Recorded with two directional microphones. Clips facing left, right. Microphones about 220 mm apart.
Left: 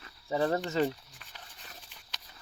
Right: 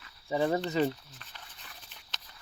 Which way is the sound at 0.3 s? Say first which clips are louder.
Right 1 dB; 5° right (ahead or behind).